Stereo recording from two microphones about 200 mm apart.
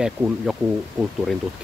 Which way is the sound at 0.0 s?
5° right (ahead or behind).